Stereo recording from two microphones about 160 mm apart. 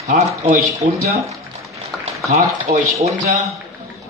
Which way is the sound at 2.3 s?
50° right (ahead or behind).